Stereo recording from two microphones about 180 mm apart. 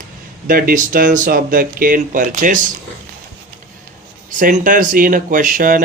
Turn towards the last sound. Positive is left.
turn(degrees=-50)  # may be behind; listen again after turning